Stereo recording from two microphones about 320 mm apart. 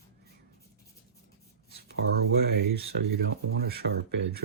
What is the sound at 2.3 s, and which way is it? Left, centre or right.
Speech, right.